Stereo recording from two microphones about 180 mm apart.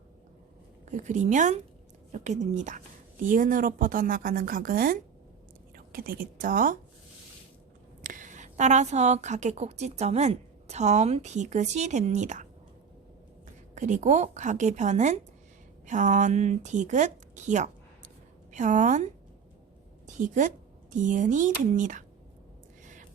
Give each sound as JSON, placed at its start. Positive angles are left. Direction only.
{"t": 0.9, "sound": "a woman's voice", "side_deg": -45}
{"t": 8.0, "sound": "a woman's voice", "side_deg": -45}
{"t": 13.7, "sound": "a woman's voice", "side_deg": -40}
{"t": 20.1, "sound": "a woman's voice", "side_deg": -45}